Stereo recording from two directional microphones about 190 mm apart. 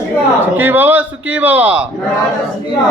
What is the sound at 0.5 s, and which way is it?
A man's voice, 10° right (ahead or behind).